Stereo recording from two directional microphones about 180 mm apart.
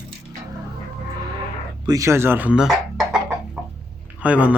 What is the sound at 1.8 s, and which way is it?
Speech, 15° right (ahead or behind).